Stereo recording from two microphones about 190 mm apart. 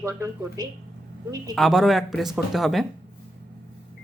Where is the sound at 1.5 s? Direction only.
Centre (ahead or behind).